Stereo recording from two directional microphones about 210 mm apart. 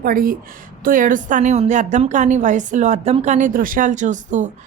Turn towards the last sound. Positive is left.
turn(degrees=-35)  # may be behind; listen again after turning